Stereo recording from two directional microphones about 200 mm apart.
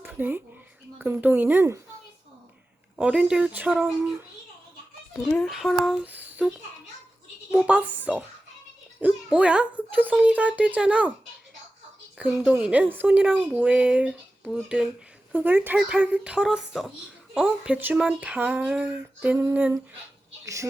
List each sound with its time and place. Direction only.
0.0 s a sound: 10° right (ahead or behind)
0.9 s speech: 10° right (ahead or behind)
2.9 s speech: 5° right (ahead or behind)
5.2 s speech: 5° left (ahead or behind)
7.5 s speech: 5° right (ahead or behind)
12.1 s speech: 5° right (ahead or behind)